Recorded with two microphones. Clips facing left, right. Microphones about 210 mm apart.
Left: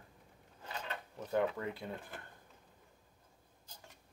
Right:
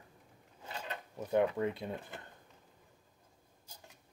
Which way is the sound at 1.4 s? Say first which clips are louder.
Right 4 dB; 15° right (ahead or behind).